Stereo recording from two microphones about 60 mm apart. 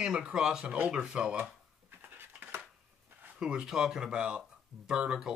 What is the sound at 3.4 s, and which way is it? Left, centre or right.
Speech, centre.